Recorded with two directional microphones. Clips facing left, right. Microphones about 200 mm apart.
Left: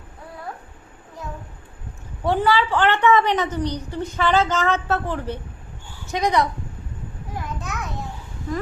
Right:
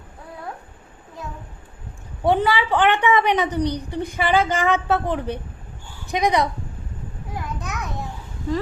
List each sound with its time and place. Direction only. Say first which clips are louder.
2.2 s a woman's voice: right 1 dB; 15° right (ahead or behind)